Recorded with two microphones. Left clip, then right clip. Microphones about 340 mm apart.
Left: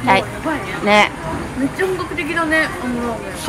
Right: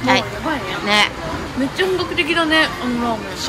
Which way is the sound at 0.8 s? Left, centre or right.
Centre.